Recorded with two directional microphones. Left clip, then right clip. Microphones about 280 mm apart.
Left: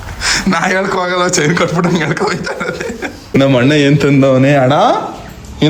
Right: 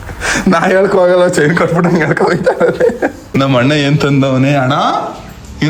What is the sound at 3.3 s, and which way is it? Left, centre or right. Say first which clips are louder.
Speech: left 2 dB; centre.